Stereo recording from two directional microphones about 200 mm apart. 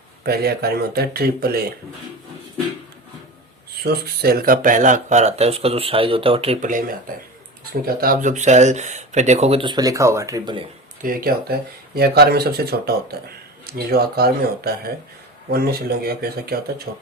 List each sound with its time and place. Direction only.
0.3 s speech: 50° right (ahead or behind)
3.8 s speech: 50° right (ahead or behind); by 10.6 s 20° right (ahead or behind)
11.0 s speech: 45° right (ahead or behind)